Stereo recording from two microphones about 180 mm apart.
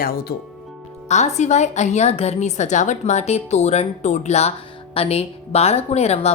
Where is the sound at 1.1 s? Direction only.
40° left (ahead or behind).